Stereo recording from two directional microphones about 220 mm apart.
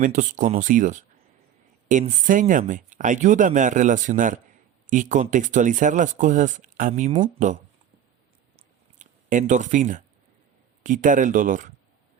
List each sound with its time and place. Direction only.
0.0 s speech: 35° right (ahead or behind)
8.5 s a sound: 35° right (ahead or behind)
10.8 s speech: 35° right (ahead or behind)